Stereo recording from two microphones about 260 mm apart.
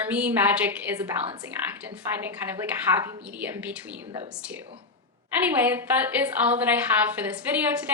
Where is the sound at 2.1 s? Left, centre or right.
Centre.